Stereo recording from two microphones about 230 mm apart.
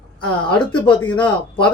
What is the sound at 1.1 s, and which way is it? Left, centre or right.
Speech, left.